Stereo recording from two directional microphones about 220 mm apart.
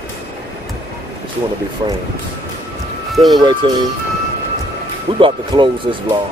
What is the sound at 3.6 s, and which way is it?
Speech, 20° right (ahead or behind).